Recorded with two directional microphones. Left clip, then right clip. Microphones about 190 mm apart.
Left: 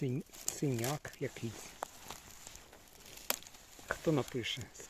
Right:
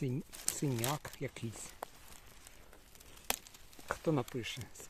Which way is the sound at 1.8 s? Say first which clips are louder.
Left 3 dB; 15° left (ahead or behind).